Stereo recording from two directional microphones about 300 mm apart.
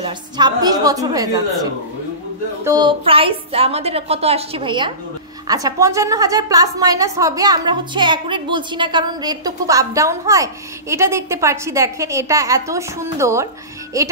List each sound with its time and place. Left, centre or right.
0.0 s a woman's voice: centre